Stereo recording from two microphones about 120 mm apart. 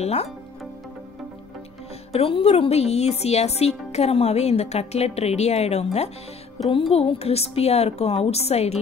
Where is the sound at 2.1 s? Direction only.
55° left (ahead or behind).